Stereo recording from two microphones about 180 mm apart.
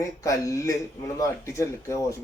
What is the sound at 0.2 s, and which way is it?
Speech, 15° left (ahead or behind).